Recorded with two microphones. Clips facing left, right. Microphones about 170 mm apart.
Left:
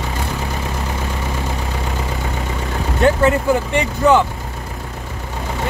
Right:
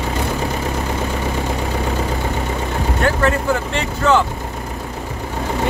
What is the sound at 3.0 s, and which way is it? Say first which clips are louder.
Speech: left 4 dB; 15° left (ahead or behind).